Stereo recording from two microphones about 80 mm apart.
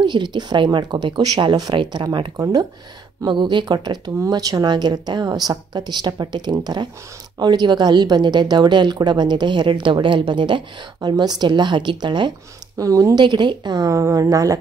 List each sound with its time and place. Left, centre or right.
0.0 s speech: right
3.3 s speech: right
4.3 s a woman's voice: right
11.0 s speech: right
12.7 s a woman's voice: right
13.2 s a woman's voice: right